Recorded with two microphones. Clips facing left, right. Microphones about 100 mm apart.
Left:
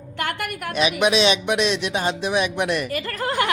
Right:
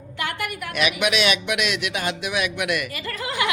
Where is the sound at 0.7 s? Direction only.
30° left (ahead or behind).